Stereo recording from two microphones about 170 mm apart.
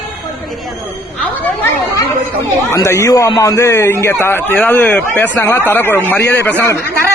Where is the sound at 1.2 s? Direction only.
10° left (ahead or behind).